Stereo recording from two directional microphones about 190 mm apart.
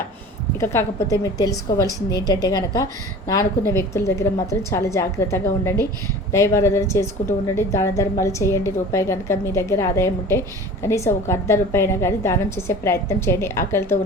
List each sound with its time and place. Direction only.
0.6 s a woman's voice: 15° left (ahead or behind)